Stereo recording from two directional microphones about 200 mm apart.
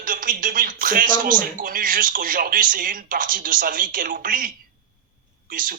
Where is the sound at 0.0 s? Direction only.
45° right (ahead or behind).